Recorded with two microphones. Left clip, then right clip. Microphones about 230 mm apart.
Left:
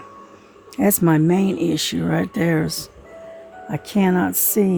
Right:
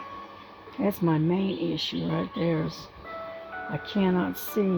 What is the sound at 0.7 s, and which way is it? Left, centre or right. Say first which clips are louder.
Speech: left 9 dB; left.